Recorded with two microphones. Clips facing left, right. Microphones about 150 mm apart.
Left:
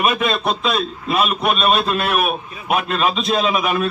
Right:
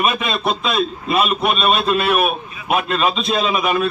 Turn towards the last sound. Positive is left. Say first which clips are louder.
# even
turn(degrees=0)  # may be behind; listen again after turning